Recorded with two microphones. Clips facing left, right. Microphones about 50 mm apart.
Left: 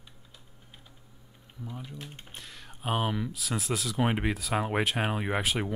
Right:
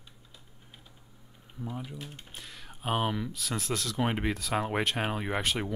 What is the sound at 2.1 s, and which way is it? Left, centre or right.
Speech, left.